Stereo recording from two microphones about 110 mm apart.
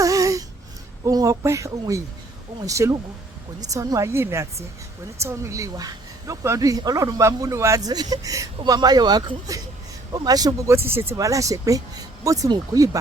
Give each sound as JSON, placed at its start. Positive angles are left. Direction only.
{"t": 0.0, "sound": "a sound", "side_deg": -30}
{"t": 2.6, "sound": "speech", "side_deg": -30}
{"t": 10.8, "sound": "speech", "side_deg": -20}